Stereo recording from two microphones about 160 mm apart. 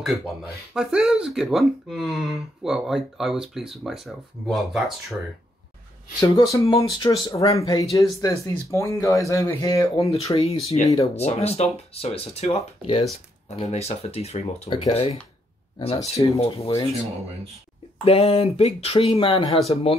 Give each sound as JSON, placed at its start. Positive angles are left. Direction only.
{"t": 0.7, "sound": "speech", "side_deg": -5}
{"t": 6.1, "sound": "speech", "side_deg": 20}
{"t": 10.0, "sound": "speech", "side_deg": 40}
{"t": 18.0, "sound": "speech", "side_deg": 35}